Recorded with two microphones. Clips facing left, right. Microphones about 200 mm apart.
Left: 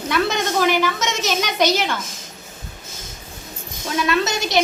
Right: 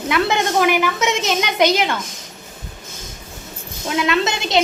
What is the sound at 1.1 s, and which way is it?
Speech, 55° right (ahead or behind).